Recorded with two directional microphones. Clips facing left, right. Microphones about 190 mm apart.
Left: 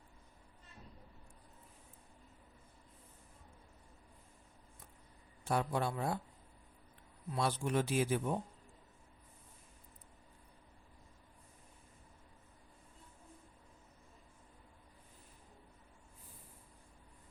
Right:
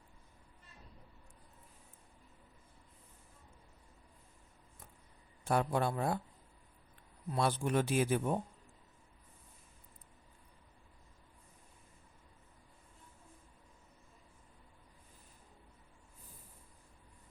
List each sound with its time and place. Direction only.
5.5 s speech: 55° right (ahead or behind)
7.3 s speech: 55° right (ahead or behind)